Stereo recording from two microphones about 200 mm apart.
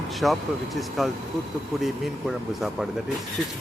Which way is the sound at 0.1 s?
Centre (ahead or behind).